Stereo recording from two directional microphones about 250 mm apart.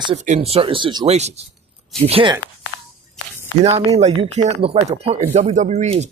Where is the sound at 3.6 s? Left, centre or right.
Right.